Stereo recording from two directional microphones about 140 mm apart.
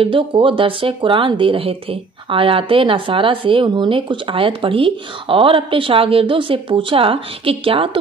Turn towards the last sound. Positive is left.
turn(degrees=-40)  # may be behind; listen again after turning